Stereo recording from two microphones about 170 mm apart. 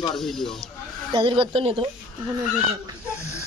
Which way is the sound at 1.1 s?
30° right (ahead or behind).